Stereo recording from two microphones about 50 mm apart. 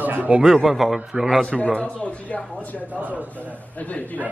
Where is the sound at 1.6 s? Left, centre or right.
Left.